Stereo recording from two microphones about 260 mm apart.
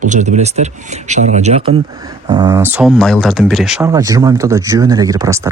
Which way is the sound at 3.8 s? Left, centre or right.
Centre.